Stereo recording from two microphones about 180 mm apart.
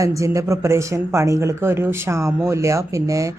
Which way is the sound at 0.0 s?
15° right (ahead or behind).